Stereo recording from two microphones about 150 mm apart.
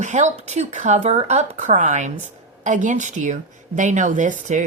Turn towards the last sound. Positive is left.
turn(degrees=-55)  # may be behind; listen again after turning